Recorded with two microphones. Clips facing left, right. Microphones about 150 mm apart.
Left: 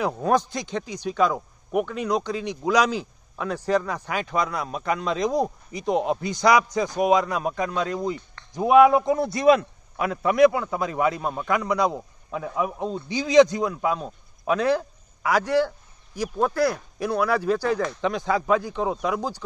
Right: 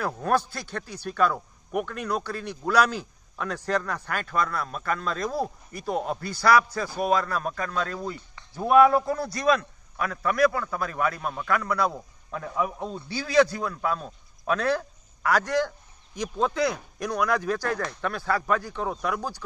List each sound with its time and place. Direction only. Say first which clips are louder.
0.0 s a man's voice: left 3 dB; 15° left (ahead or behind)